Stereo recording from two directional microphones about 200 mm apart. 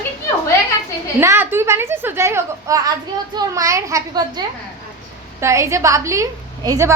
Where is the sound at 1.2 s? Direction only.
10° right (ahead or behind).